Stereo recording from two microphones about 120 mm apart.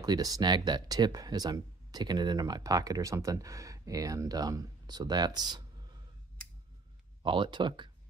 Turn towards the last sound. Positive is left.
turn(degrees=-40)  # may be behind; listen again after turning